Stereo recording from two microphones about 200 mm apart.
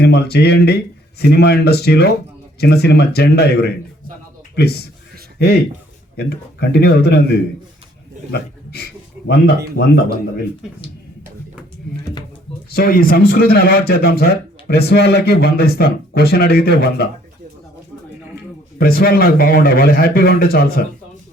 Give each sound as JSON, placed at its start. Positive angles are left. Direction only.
{"t": 0.0, "sound": "speech", "side_deg": 55}
{"t": 6.1, "sound": "speech", "side_deg": 55}
{"t": 8.3, "sound": "speech", "side_deg": 55}
{"t": 12.7, "sound": "speech", "side_deg": 50}
{"t": 18.8, "sound": "speech", "side_deg": 50}